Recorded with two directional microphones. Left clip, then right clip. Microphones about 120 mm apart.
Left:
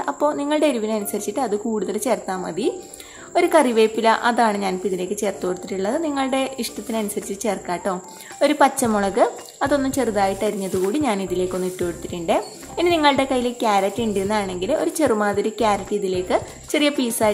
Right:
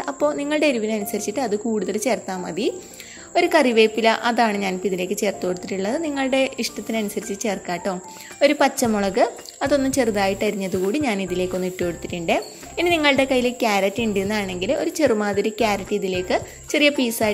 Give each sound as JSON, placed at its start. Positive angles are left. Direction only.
{"t": 0.0, "sound": "a woman's voice", "side_deg": -30}
{"t": 10.0, "sound": "a woman's voice", "side_deg": -50}